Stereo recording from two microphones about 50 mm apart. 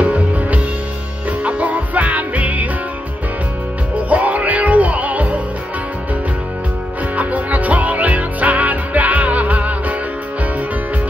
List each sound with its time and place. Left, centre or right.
0.0 s music: right
4.1 s music: right
7.2 s music: right